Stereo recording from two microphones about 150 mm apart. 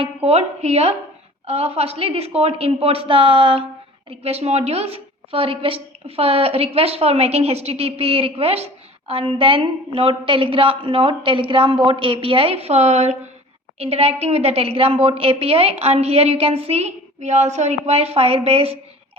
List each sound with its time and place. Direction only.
0.0 s a woman's voice: 45° right (ahead or behind)